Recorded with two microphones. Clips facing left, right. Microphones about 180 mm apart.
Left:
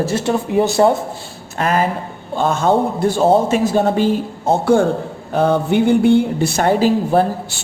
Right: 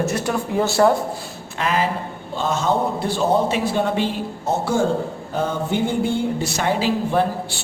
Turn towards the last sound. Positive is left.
turn(degrees=45)  # may be behind; listen again after turning